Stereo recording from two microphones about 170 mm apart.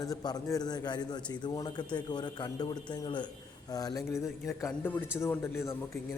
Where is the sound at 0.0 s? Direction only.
20° left (ahead or behind).